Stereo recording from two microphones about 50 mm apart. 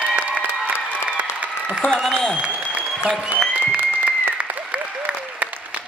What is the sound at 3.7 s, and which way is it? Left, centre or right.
Applause, right.